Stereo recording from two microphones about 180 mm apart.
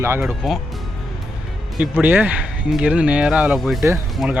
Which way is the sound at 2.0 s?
10° right (ahead or behind).